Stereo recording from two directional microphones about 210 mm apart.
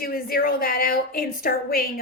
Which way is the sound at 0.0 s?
45° left (ahead or behind).